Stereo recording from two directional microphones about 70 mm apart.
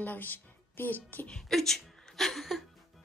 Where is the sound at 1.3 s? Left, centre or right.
Centre.